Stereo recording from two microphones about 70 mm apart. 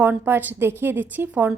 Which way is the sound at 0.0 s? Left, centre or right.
Right.